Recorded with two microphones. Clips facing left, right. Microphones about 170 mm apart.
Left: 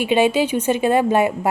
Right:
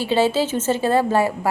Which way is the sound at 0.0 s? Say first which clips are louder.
Left 2 dB; 15° left (ahead or behind).